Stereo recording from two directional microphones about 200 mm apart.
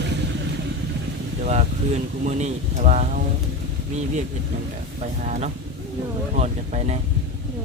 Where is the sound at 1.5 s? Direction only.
35° right (ahead or behind).